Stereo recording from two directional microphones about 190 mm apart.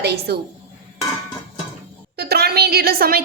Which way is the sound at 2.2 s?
55° right (ahead or behind).